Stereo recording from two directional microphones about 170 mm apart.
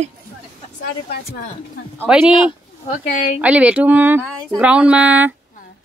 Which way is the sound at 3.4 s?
5° right (ahead or behind).